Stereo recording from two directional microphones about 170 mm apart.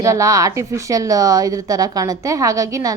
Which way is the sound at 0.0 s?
20° right (ahead or behind).